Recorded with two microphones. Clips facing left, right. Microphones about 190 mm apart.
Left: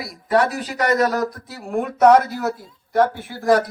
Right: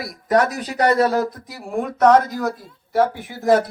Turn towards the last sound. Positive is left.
turn(degrees=-25)  # may be behind; listen again after turning